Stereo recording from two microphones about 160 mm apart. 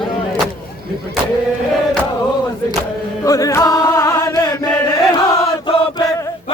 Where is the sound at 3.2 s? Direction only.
20° left (ahead or behind).